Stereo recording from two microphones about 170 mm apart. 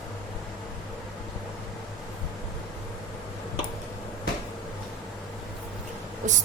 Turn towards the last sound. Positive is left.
turn(degrees=-50)  # may be behind; listen again after turning